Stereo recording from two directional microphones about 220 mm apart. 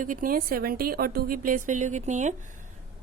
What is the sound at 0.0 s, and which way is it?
A woman's voice, 35° right (ahead or behind).